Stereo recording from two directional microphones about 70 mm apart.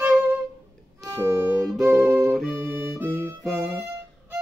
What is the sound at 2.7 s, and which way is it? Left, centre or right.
Music, right.